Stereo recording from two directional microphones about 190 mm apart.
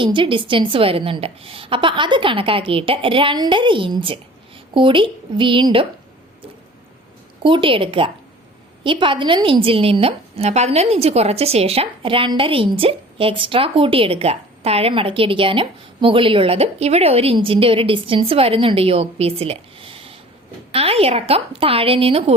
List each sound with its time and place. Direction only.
0.0 s a woman's voice: 25° right (ahead or behind)
7.4 s a woman's voice: 25° right (ahead or behind)